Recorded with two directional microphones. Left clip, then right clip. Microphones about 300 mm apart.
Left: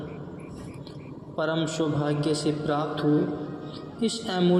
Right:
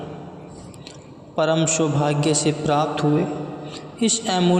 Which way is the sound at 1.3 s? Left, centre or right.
Right.